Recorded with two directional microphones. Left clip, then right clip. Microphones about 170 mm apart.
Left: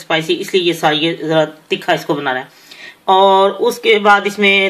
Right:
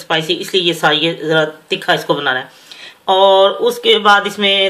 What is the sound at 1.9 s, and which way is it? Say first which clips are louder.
Speech: right 2 dB; 20° left (ahead or behind).